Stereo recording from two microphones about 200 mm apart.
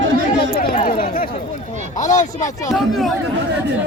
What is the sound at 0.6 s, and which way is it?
Speech, 45° left (ahead or behind).